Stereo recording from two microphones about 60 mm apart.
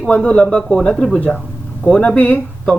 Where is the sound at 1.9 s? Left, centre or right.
Centre.